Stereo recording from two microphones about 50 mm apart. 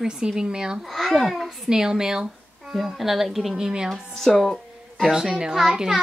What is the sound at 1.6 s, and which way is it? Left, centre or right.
Speech, centre.